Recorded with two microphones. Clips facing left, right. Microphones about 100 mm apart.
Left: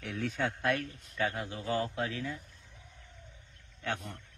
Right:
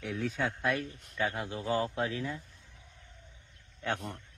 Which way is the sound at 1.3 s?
25° right (ahead or behind).